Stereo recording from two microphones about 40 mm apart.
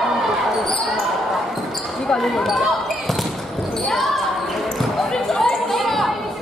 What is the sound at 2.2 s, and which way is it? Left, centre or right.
Basketball bounce, centre.